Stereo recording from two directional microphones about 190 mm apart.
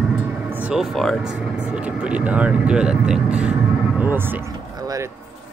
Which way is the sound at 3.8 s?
5° right (ahead or behind).